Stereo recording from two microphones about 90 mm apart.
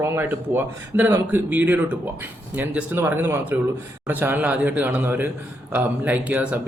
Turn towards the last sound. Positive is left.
turn(degrees=-15)  # may be behind; listen again after turning